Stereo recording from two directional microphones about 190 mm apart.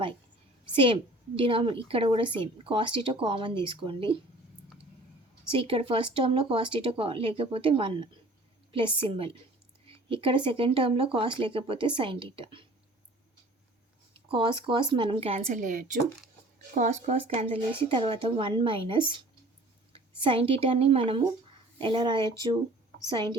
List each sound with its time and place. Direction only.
1.4 s speech: 30° right (ahead or behind)
5.5 s speech: 30° right (ahead or behind)
14.3 s speech: 25° right (ahead or behind)